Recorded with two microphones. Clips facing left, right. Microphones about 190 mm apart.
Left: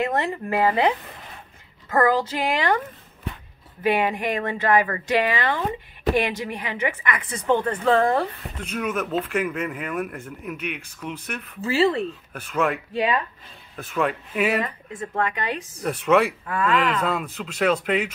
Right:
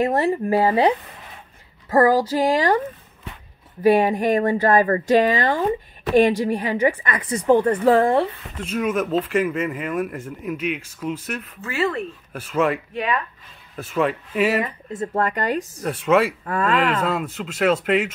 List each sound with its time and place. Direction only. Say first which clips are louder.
0.0 s a woman's voice: right 5 dB; 35° right (ahead or behind)
3.8 s a woman's voice: right 6 dB; 40° right (ahead or behind)
8.6 s speech: right 4 dB; 5° right (ahead or behind)
11.6 s speech: left 4 dB; 30° left (ahead or behind)
12.3 s speech: right 5 dB; 5° right (ahead or behind)
12.9 s speech: left 1 dB; 30° left (ahead or behind)
13.7 s speech: right 3 dB; 5° right (ahead or behind)
14.6 s speech: right 3 dB; 25° right (ahead or behind)
15.1 s a woman's voice: right 4 dB; 40° right (ahead or behind)
15.8 s speech: even; centre (ahead or behind)
16.4 s a woman's voice: right 2 dB; 40° right (ahead or behind)
17.0 s speech: right 2 dB; centre (ahead or behind)